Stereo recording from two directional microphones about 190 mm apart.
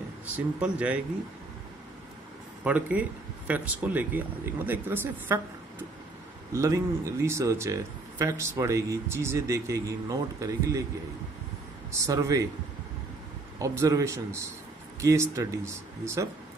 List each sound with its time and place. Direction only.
0.6 s speech: 5° right (ahead or behind)
2.6 s speech: 5° right (ahead or behind)
6.5 s speech: 15° right (ahead or behind)
11.9 s speech: 15° right (ahead or behind)
13.6 s speech: 15° right (ahead or behind)